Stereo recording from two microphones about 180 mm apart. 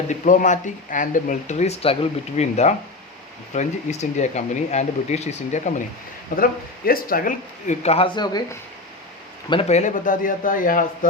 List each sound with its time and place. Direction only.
0.1 s speech: 45° left (ahead or behind)
6.3 s speech: 55° left (ahead or behind); by 8.4 s 25° left (ahead or behind)
9.5 s speech: 35° left (ahead or behind)